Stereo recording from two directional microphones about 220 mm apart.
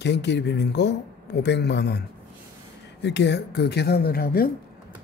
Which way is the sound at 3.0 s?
50° left (ahead or behind).